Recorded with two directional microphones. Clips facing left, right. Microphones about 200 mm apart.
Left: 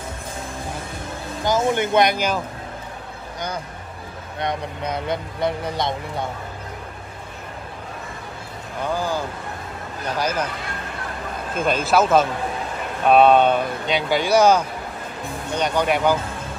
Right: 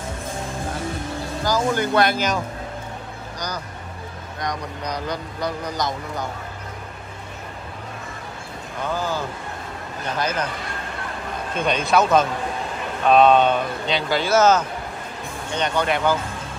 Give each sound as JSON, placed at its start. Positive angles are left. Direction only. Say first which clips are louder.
{"t": 1.4, "sound": "speech", "louder": "left 2 dB", "side_deg": 25}
{"t": 3.3, "sound": "speech", "louder": "left 2 dB", "side_deg": 25}
{"t": 8.8, "sound": "speech", "louder": "left 1 dB", "side_deg": 10}
{"t": 11.5, "sound": "a man's voice", "louder": "left 1 dB", "side_deg": 5}